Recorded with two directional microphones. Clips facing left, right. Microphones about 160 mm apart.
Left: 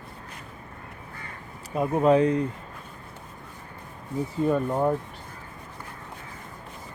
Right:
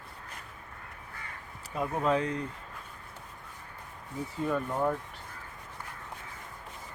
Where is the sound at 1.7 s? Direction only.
20° left (ahead or behind).